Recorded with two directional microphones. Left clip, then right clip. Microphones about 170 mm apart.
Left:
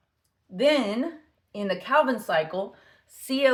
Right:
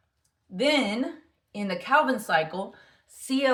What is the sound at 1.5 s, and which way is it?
Speech, 40° left (ahead or behind).